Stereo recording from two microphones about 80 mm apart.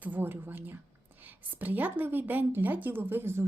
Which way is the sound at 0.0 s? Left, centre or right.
Right.